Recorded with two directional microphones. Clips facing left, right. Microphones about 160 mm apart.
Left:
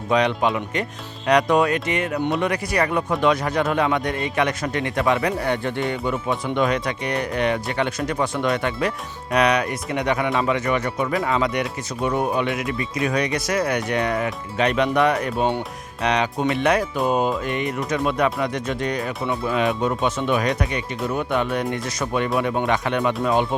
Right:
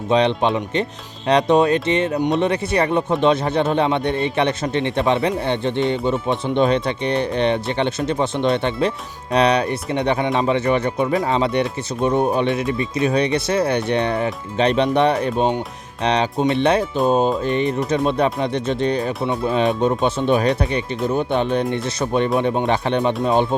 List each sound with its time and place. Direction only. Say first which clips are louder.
0.1 s speech: right 3 dB; 25° right (ahead or behind)